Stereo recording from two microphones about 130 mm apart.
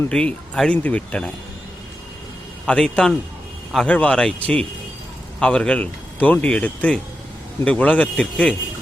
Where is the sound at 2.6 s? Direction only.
5° left (ahead or behind).